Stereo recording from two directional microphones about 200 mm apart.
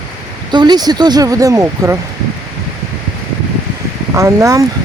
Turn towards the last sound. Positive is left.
turn(degrees=-15)  # may be behind; listen again after turning